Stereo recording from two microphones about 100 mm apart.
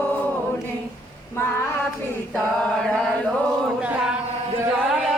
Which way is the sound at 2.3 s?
5° left (ahead or behind).